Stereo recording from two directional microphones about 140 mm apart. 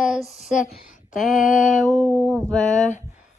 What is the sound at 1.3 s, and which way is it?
Speech, 70° left (ahead or behind).